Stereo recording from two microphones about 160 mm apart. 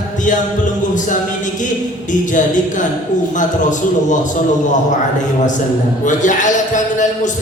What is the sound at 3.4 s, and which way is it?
Speech, 50° left (ahead or behind).